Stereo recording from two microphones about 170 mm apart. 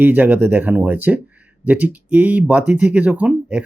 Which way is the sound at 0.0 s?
10° right (ahead or behind).